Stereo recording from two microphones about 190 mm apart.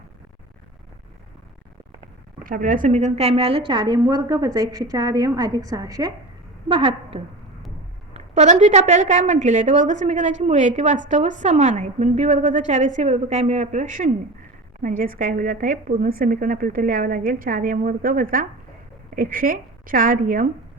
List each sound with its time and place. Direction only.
2.4 s a woman's voice: 45° right (ahead or behind); by 6.1 s 20° right (ahead or behind)
6.7 s a woman's voice: 30° right (ahead or behind); by 20.5 s 45° right (ahead or behind)